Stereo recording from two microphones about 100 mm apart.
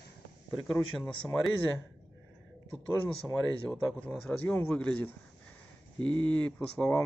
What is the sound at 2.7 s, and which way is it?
Speech, 65° left (ahead or behind).